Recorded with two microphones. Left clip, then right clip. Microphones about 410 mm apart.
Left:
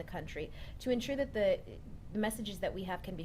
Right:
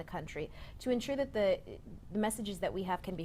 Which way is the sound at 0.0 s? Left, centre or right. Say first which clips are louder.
Right 1 dB; right.